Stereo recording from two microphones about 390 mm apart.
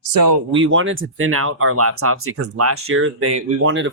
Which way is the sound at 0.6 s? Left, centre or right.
Right.